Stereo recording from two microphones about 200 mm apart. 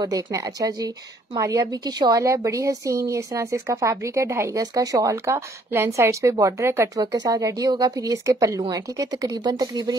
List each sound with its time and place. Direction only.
0.0 s speech: 15° right (ahead or behind)